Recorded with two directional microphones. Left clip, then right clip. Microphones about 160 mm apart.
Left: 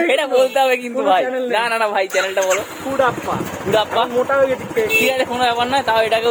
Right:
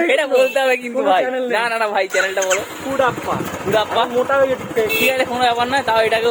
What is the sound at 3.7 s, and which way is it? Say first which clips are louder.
Speech: even; 15° left (ahead or behind).